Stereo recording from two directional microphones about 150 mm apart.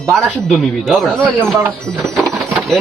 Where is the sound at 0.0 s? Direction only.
5° left (ahead or behind).